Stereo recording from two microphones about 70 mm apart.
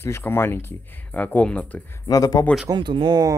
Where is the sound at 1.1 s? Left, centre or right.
Left.